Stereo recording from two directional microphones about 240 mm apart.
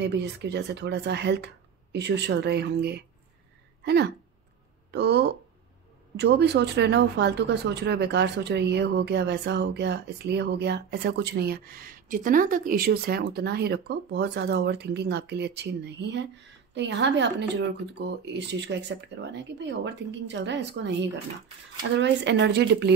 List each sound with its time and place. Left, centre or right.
0.0 s speech: right